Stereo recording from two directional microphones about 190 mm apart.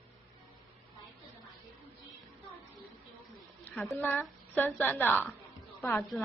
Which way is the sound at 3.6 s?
5° left (ahead or behind).